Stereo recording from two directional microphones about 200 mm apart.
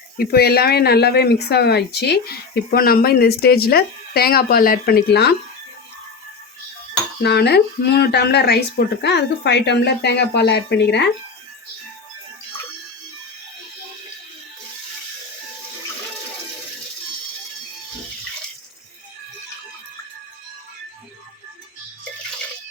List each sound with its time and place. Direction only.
0.2 s speech: 50° left (ahead or behind)
7.2 s speech: 55° left (ahead or behind)